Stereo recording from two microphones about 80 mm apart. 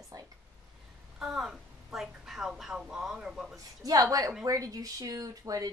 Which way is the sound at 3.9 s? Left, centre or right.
Right.